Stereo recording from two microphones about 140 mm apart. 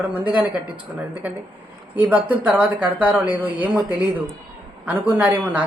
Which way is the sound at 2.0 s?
10° right (ahead or behind).